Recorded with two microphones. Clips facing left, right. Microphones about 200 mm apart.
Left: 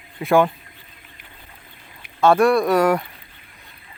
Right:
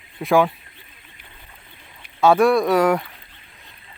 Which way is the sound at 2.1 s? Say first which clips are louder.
Even; 5° right (ahead or behind).